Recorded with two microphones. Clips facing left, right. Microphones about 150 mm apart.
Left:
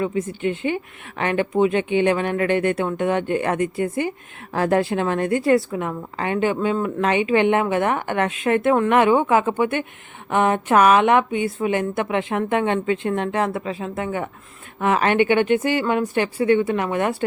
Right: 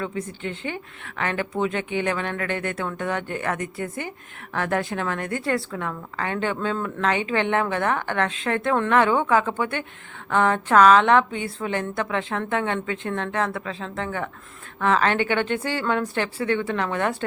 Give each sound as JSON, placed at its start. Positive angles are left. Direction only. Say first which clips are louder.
{"t": 0.0, "sound": "a woman's voice", "louder": "left 7 dB", "side_deg": 15}